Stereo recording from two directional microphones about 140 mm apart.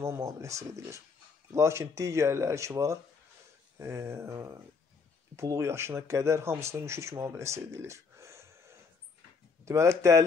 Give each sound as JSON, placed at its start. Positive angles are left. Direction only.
{"t": 0.0, "sound": "speech", "side_deg": -20}